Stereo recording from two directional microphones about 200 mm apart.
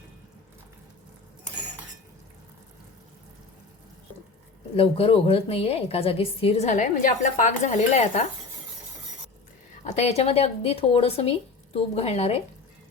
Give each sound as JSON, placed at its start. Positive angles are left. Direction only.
{"t": 4.8, "sound": "a woman's voice", "side_deg": 30}
{"t": 9.8, "sound": "a woman's voice", "side_deg": 35}